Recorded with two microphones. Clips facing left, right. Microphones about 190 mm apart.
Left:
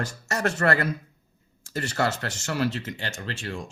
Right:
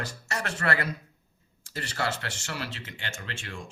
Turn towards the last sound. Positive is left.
turn(degrees=35)  # may be behind; listen again after turning